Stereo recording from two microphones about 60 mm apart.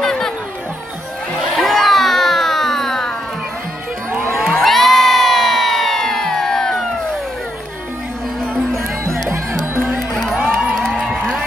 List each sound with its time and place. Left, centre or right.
0.0 s chatter: centre
1.5 s a sound: centre
4.3 s crowd: centre
9.3 s music: right
9.9 s music: centre
10.4 s crowd: centre